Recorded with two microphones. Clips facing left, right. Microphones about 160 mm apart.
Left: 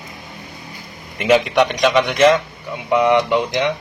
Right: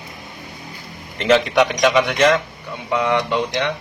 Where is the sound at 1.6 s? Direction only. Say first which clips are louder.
Even; 5° right (ahead or behind).